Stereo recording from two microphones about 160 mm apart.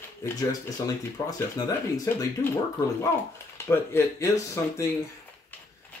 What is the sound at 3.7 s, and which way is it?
Speech, 15° left (ahead or behind).